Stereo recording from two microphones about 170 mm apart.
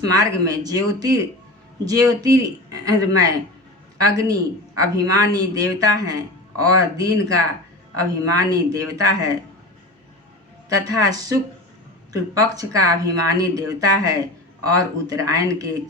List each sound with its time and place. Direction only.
0.0 s a man's voice: 20° right (ahead or behind)
10.8 s speech: 20° right (ahead or behind)